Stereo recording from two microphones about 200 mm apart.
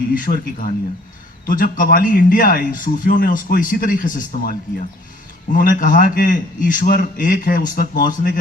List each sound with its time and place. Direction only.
0.1 s a man's voice: 45° left (ahead or behind)
1.5 s a man's voice: 45° left (ahead or behind)